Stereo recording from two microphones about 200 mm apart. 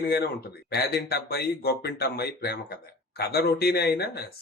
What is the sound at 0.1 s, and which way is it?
Speech, 50° left (ahead or behind).